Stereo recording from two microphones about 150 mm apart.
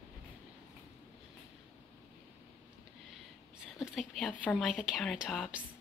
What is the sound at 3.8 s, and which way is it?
A woman's voice, centre (ahead or behind).